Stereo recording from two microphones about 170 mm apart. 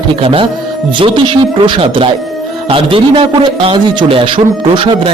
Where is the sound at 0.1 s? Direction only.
30° right (ahead or behind).